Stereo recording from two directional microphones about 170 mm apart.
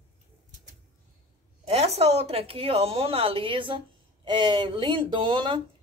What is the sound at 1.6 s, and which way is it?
A woman's voice, 40° right (ahead or behind).